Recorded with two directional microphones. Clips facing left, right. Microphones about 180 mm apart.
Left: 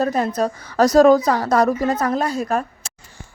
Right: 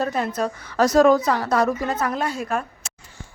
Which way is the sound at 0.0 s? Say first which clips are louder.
Left 4 dB; 40° left (ahead or behind).